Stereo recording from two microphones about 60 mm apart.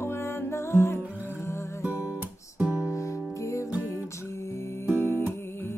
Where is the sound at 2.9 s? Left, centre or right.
Left.